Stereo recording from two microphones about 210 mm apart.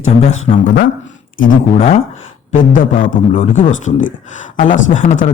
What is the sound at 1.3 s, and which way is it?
Speech, 35° left (ahead or behind).